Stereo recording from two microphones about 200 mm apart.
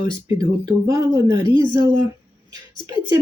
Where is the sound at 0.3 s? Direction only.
20° right (ahead or behind).